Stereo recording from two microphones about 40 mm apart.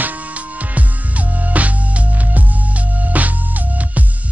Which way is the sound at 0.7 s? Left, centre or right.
Right.